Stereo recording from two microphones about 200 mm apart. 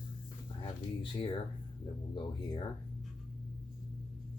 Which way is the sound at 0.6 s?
25° left (ahead or behind).